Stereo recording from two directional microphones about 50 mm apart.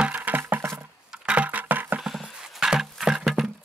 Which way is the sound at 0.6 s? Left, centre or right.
Right.